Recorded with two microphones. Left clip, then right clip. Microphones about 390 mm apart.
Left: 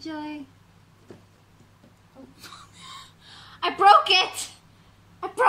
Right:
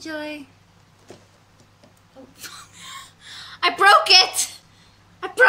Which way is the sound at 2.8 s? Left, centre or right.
Centre.